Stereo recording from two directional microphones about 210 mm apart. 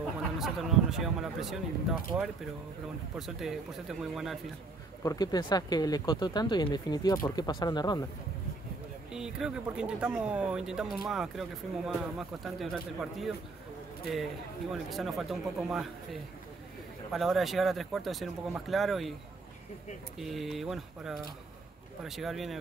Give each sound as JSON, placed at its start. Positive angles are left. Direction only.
{"t": 0.4, "sound": "speech", "side_deg": 0}
{"t": 5.0, "sound": "speech", "side_deg": 15}
{"t": 9.1, "sound": "speech", "side_deg": -5}
{"t": 14.7, "sound": "speech", "side_deg": 0}
{"t": 20.2, "sound": "speech", "side_deg": 0}